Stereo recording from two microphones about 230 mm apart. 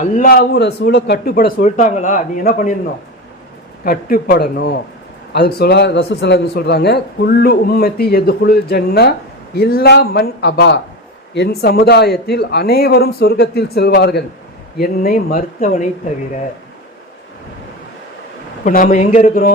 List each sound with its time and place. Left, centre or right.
0.0 s a man's voice: left
3.8 s a man's voice: left
18.6 s a man's voice: left